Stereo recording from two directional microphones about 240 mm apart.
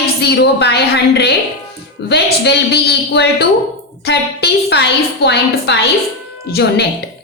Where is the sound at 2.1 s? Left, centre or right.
Left.